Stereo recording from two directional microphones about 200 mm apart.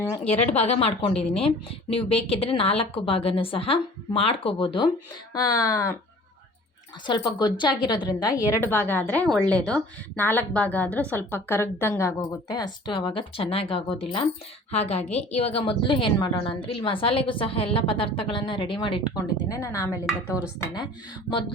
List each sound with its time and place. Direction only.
0.5 s a woman's voice: 30° left (ahead or behind); by 6.0 s 15° left (ahead or behind)
7.1 s a woman's voice: 20° left (ahead or behind)
8.5 s a woman's voice: 10° left (ahead or behind)